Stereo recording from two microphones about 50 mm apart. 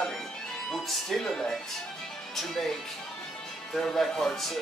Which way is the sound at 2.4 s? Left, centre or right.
Centre.